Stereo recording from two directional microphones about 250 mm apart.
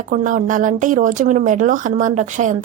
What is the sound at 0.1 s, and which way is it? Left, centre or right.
A woman's voice, right.